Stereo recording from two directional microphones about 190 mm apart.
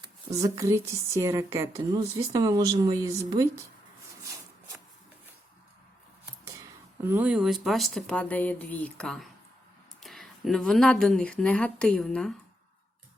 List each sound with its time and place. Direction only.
0.3 s a woman's voice: 15° right (ahead or behind)
7.0 s speech: 10° right (ahead or behind)